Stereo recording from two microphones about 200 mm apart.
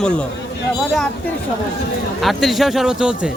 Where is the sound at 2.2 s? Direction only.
Centre (ahead or behind).